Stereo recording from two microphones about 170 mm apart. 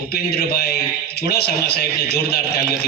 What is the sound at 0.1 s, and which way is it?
A man's voice, 65° left (ahead or behind).